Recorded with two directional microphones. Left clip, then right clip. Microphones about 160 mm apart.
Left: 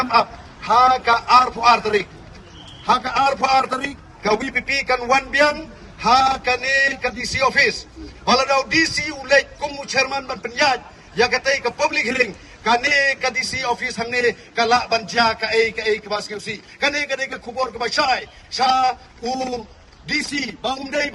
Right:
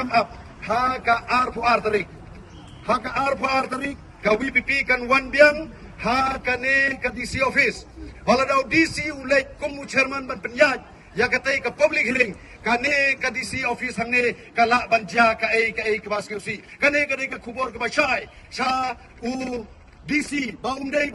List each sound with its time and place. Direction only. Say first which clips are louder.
0.0 s a man's voice: left 4 dB; 35° left (ahead or behind)